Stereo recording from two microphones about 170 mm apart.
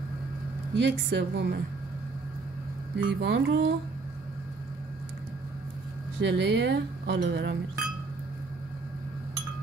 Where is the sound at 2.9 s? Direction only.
90° right.